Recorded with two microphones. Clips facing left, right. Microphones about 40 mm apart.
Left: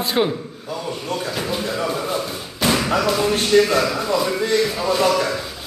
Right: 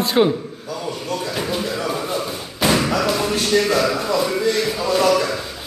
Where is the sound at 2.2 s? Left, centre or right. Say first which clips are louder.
Right 1 dB; centre.